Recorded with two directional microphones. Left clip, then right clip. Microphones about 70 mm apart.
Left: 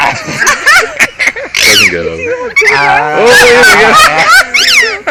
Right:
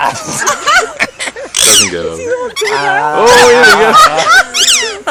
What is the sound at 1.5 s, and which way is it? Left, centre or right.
Speech, right.